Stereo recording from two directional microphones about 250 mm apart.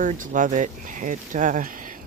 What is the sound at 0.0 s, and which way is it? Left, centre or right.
Speech, right.